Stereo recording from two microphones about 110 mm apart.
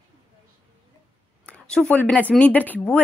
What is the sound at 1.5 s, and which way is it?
Speech, 10° left (ahead or behind).